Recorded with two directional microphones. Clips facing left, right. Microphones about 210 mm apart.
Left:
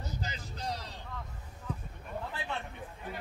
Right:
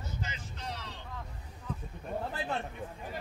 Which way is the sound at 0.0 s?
35° left (ahead or behind).